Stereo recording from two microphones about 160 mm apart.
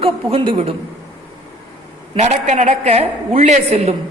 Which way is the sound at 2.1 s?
45° right (ahead or behind).